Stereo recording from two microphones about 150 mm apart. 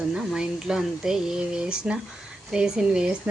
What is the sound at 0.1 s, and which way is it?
A woman's voice, 5° right (ahead or behind).